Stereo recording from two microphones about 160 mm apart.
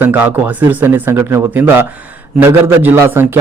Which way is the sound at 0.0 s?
10° right (ahead or behind).